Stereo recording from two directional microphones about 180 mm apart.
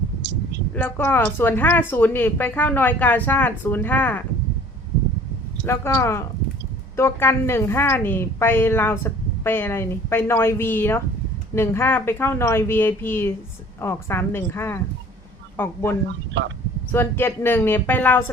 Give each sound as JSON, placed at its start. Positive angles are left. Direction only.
{"t": 0.7, "sound": "a woman's voice", "side_deg": 10}
{"t": 5.6, "sound": "a woman's voice", "side_deg": 15}
{"t": 16.4, "sound": "speech", "side_deg": -75}
{"t": 16.9, "sound": "a woman's voice", "side_deg": 10}